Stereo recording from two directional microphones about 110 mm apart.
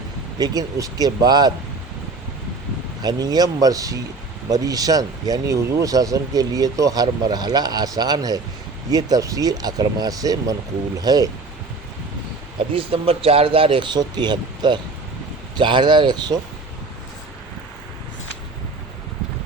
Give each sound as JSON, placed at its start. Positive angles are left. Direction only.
{"t": 0.3, "sound": "speech", "side_deg": -35}
{"t": 3.0, "sound": "speech", "side_deg": -35}
{"t": 12.5, "sound": "speech", "side_deg": -55}